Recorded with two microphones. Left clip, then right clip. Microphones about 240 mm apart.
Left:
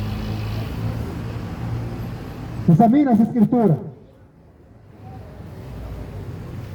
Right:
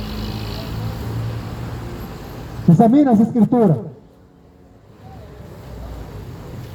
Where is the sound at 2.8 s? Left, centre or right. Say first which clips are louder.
Right 2 dB; right.